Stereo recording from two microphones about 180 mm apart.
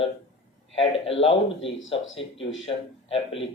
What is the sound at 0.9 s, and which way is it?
Speech, 30° left (ahead or behind).